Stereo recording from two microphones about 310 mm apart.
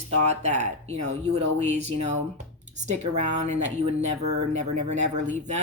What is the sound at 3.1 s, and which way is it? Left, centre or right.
Speech, right.